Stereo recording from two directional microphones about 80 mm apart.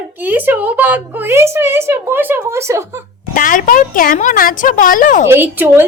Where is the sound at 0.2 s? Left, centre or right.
Right.